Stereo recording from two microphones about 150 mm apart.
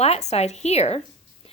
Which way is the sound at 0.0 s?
45° left (ahead or behind).